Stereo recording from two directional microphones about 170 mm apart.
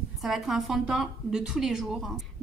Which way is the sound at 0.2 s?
Centre (ahead or behind).